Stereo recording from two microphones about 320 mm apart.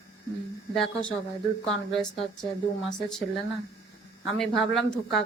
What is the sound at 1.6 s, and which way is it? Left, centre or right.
Speech, centre.